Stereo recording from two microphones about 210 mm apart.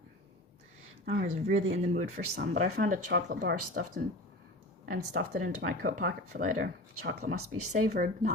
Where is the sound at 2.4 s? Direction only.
45° right (ahead or behind).